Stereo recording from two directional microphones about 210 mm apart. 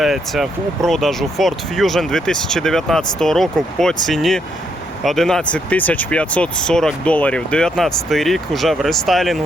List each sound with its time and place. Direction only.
0.0 s speech: centre (ahead or behind)